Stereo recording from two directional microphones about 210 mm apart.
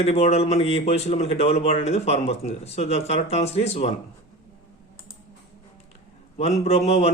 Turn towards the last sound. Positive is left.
turn(degrees=30)  # may be behind; listen again after turning